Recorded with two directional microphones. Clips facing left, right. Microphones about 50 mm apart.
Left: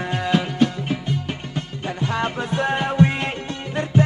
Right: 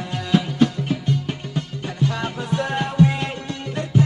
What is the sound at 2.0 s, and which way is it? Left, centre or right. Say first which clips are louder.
Music: left 1 dB; left.